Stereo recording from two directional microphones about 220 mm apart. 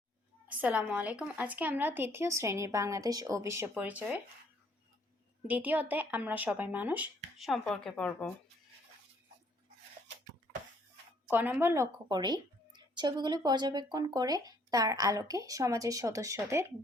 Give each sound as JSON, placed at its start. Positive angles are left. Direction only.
{"t": 0.4, "sound": "a woman's voice", "side_deg": -5}
{"t": 5.5, "sound": "a woman's voice", "side_deg": -5}
{"t": 11.3, "sound": "a woman's voice", "side_deg": -10}